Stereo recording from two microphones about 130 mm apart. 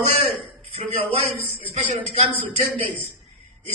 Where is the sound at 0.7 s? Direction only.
50° right (ahead or behind).